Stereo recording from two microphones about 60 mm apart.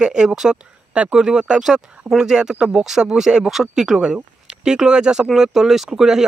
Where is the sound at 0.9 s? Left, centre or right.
Centre.